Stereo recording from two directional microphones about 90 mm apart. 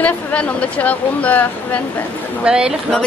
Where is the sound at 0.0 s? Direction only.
15° left (ahead or behind).